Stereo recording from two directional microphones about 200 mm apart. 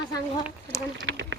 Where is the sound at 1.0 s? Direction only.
65° right (ahead or behind).